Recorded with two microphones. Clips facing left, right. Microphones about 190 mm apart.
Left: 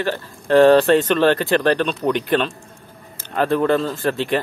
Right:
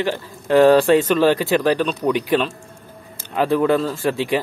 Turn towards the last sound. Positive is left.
turn(degrees=-10)  # may be behind; listen again after turning